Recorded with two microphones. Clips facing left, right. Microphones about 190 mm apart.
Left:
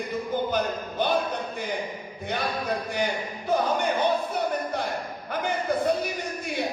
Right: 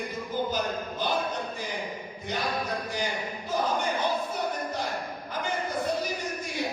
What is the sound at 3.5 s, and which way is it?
Speech, 60° left (ahead or behind).